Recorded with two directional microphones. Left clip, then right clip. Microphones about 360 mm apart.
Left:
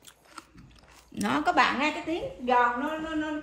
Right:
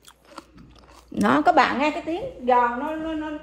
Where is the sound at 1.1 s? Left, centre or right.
Right.